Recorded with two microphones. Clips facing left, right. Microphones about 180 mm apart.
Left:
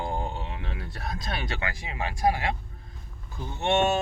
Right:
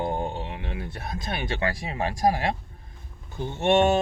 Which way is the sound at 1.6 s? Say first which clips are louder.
Right 5 dB; 35° right (ahead or behind).